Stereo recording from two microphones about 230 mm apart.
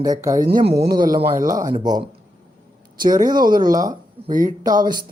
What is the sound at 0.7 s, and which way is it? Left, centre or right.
Speech, right.